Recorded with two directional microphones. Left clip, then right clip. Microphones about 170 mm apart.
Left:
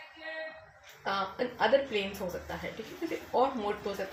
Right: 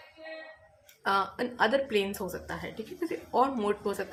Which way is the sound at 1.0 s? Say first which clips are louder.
Right 4 dB; 40° right (ahead or behind).